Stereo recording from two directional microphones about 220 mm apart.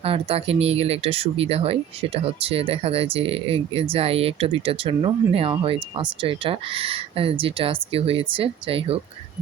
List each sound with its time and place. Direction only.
0.0 s speech: 25° right (ahead or behind)